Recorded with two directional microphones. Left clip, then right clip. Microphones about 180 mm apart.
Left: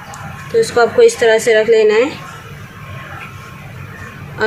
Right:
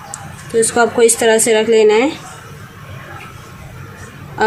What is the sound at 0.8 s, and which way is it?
A woman's voice, 55° right (ahead or behind).